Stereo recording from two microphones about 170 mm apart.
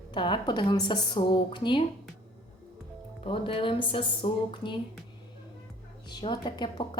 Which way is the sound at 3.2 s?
30° left (ahead or behind).